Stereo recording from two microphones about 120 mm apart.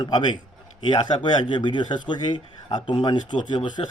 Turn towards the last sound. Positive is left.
turn(degrees=40)  # may be behind; listen again after turning